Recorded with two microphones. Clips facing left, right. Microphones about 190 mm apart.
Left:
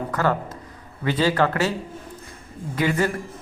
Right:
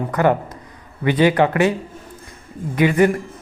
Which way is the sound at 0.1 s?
20° right (ahead or behind).